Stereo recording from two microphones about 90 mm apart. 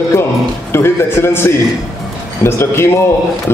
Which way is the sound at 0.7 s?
25° left (ahead or behind).